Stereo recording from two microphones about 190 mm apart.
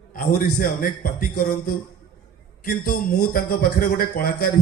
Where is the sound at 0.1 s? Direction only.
50° left (ahead or behind).